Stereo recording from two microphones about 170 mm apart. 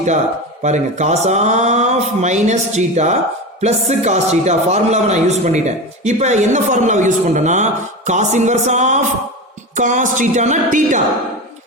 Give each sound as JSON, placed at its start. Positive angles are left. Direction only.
{"t": 0.6, "sound": "speech", "side_deg": -45}